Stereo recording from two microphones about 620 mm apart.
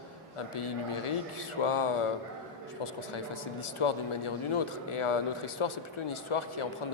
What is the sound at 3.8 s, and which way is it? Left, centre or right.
A man's voice, left.